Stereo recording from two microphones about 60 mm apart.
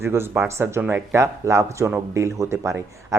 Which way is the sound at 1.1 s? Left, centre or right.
Right.